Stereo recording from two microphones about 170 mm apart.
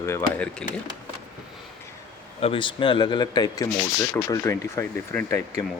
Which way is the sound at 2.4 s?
30° left (ahead or behind).